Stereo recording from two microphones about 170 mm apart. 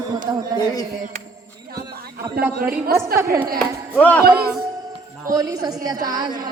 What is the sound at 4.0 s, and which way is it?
Speech, 10° left (ahead or behind).